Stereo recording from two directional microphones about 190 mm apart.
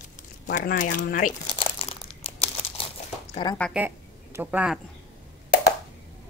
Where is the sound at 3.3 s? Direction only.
25° left (ahead or behind).